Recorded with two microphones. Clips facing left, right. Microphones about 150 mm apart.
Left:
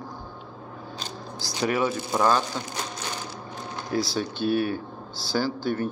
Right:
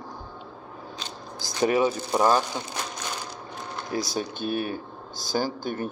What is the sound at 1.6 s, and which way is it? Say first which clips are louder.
Speech: right 3 dB; 20° right (ahead or behind).